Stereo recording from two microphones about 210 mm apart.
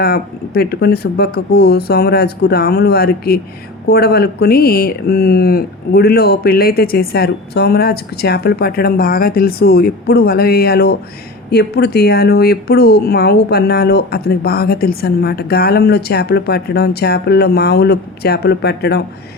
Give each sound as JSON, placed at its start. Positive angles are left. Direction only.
{"t": 0.0, "sound": "speech", "side_deg": 50}